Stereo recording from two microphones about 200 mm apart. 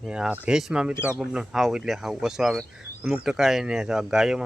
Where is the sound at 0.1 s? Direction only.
5° right (ahead or behind).